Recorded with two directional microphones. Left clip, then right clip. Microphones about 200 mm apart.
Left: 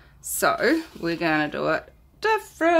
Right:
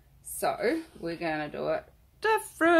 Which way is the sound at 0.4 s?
35° left (ahead or behind).